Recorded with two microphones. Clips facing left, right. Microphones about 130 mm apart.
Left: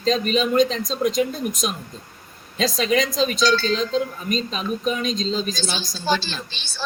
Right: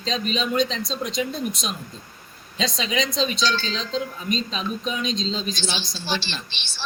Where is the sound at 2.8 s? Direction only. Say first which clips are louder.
Left 5 dB; 50° left (ahead or behind).